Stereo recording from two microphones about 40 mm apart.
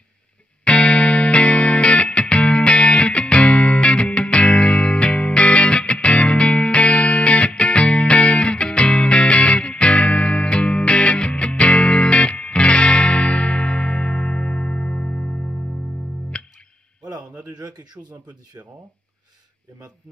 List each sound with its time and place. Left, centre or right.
0.7 s music: left